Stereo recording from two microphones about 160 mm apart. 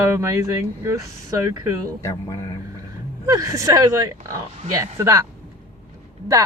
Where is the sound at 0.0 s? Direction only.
15° right (ahead or behind).